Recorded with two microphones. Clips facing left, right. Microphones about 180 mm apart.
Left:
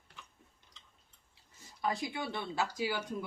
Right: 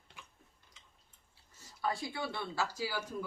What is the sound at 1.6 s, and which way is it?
Speech, 15° left (ahead or behind).